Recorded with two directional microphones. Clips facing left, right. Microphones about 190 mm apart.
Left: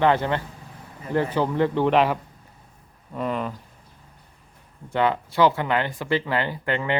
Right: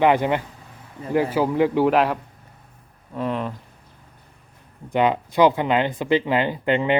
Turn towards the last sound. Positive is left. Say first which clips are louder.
# right 5 dB
turn(degrees=-20)  # may be behind; listen again after turning